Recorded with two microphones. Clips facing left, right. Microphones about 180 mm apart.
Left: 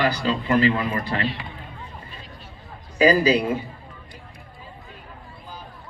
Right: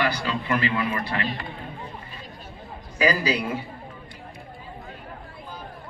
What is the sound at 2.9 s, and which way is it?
Speech, 25° left (ahead or behind).